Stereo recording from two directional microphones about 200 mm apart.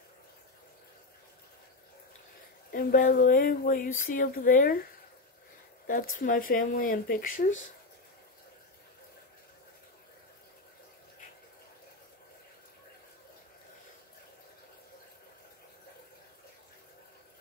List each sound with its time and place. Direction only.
2.7 s speech: 45° left (ahead or behind)
6.1 s speech: 45° left (ahead or behind)